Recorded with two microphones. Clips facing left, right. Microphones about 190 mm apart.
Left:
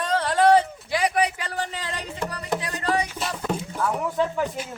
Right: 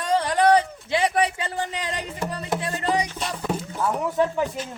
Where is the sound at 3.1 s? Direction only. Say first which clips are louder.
Even; centre (ahead or behind).